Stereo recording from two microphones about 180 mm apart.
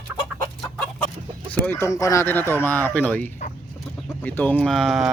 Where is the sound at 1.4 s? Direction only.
10° left (ahead or behind).